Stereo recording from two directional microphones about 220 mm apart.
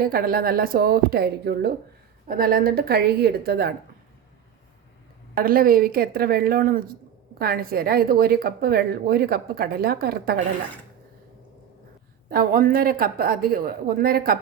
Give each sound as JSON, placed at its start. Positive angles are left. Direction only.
{"t": 0.0, "sound": "a woman's voice", "side_deg": -40}
{"t": 5.3, "sound": "a woman's voice", "side_deg": -40}
{"t": 12.3, "sound": "speech", "side_deg": -40}